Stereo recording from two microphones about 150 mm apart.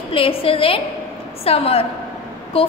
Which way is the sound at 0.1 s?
40° left (ahead or behind).